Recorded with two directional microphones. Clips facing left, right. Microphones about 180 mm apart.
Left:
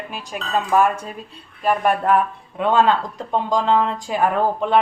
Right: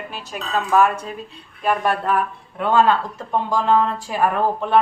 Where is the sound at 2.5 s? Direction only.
20° left (ahead or behind).